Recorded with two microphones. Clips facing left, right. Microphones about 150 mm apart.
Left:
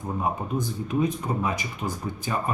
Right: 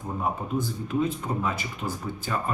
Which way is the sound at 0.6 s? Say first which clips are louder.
Left 2 dB; 15° left (ahead or behind).